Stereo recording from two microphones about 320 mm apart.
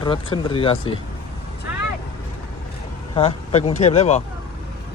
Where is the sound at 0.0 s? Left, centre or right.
Centre.